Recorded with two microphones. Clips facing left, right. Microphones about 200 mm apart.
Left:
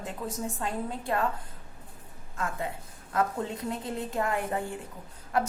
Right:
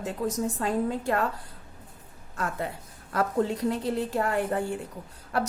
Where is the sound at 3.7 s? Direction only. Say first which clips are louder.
Right 6 dB; 80° right.